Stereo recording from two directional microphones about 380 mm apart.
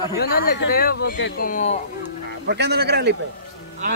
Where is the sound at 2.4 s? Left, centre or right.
Right.